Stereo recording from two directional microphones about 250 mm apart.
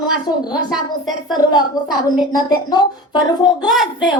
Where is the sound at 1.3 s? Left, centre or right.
Centre.